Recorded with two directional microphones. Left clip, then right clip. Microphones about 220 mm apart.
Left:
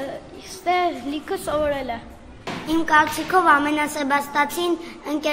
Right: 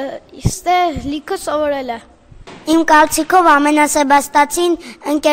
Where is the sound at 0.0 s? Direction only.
50° right (ahead or behind).